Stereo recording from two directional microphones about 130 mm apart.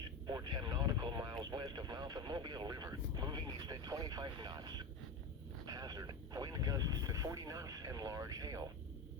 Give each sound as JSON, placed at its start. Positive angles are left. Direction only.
{"t": 0.3, "sound": "vehicle", "side_deg": -30}